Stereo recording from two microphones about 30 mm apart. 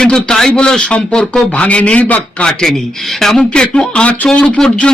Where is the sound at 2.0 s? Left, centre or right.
Left.